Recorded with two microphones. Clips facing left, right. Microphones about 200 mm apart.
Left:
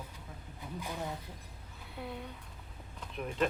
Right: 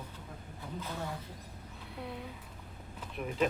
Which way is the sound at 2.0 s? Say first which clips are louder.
Even; centre (ahead or behind).